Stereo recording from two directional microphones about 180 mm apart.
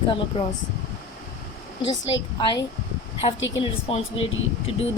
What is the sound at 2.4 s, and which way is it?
A woman's voice, 25° left (ahead or behind).